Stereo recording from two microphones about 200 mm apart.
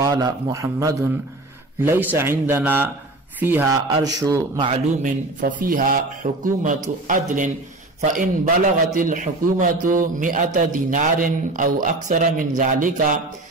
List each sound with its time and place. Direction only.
0.0 s a man's voice: 20° right (ahead or behind)
3.8 s a man's voice: 20° right (ahead or behind)
4.6 s a man's voice: 40° right (ahead or behind)